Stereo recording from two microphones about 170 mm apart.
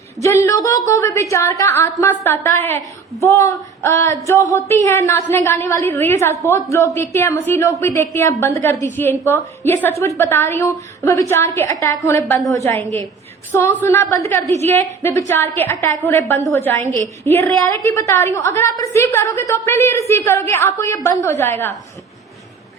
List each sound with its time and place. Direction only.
0.2 s a woman's voice: 15° left (ahead or behind)
4.7 s a woman's voice: 15° left (ahead or behind)